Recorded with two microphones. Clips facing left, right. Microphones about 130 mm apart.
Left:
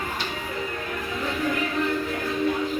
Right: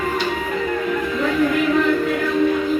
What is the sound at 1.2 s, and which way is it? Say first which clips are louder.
Music: right 7 dB; 90° right.